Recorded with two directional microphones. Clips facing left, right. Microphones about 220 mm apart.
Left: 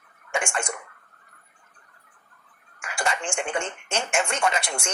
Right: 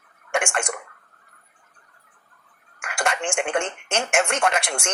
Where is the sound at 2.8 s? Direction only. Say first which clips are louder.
Right 2 dB; 55° right (ahead or behind).